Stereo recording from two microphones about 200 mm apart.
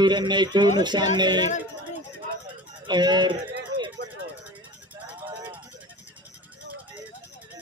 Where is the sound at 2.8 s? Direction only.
20° right (ahead or behind).